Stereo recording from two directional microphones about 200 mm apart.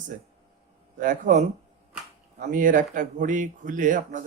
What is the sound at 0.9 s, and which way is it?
Speech, 40° right (ahead or behind).